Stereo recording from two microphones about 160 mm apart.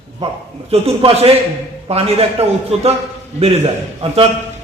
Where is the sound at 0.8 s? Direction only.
35° right (ahead or behind).